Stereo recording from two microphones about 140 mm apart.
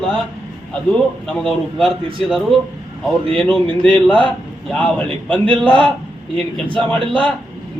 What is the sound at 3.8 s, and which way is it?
A man's voice, 5° left (ahead or behind).